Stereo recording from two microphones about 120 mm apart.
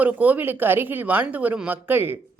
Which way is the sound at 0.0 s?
15° right (ahead or behind).